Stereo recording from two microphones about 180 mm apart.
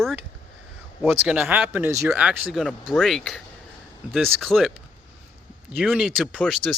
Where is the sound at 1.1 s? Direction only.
10° right (ahead or behind).